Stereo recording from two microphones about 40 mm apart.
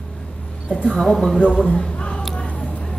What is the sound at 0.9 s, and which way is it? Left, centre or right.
Speech, centre.